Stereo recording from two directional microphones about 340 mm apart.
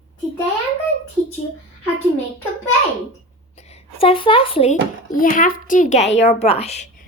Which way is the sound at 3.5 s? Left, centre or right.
Centre.